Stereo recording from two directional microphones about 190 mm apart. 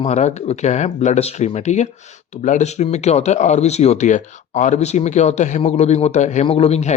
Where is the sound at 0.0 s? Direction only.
35° left (ahead or behind).